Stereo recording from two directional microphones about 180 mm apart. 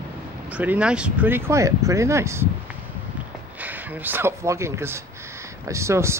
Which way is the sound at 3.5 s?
10° right (ahead or behind).